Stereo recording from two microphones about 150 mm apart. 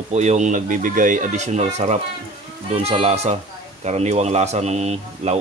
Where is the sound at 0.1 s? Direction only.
50° right (ahead or behind).